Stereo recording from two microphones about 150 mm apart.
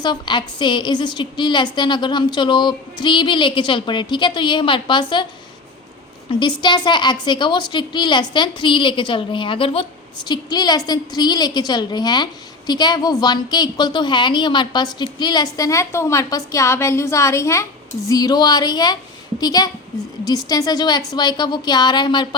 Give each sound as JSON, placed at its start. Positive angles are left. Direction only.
{"t": 0.0, "sound": "a woman's voice", "side_deg": 30}
{"t": 6.6, "sound": "a woman's voice", "side_deg": 30}